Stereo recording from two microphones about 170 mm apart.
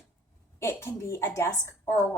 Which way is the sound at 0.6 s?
15° left (ahead or behind).